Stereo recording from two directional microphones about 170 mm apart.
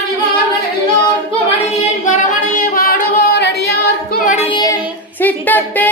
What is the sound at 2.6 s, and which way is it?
Singing, 50° left (ahead or behind).